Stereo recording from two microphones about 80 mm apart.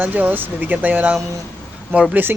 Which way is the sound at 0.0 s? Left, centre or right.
Right.